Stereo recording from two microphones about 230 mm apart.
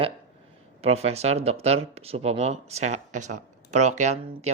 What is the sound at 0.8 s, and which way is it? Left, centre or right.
Speech, right.